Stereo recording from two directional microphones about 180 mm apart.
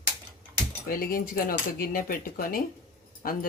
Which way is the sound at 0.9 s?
55° left (ahead or behind).